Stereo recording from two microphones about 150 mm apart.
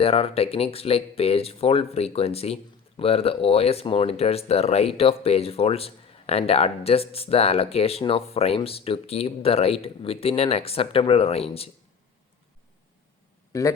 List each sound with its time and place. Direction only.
0.0 s speech: 40° left (ahead or behind)
13.5 s a man's voice: 20° left (ahead or behind)